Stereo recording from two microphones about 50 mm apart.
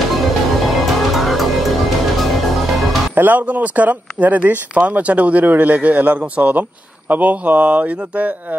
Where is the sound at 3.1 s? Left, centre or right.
Right.